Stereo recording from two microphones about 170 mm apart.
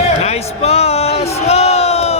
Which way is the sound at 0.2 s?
40° left (ahead or behind).